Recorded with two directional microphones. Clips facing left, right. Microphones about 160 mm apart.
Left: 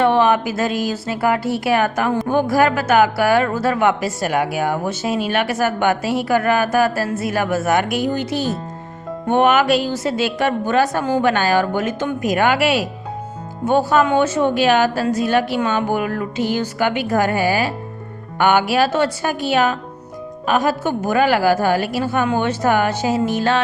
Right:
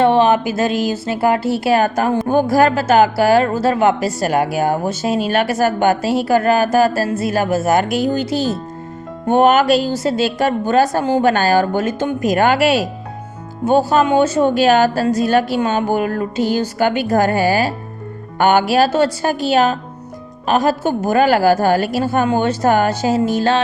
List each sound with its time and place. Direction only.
0.0 s speech: 30° right (ahead or behind)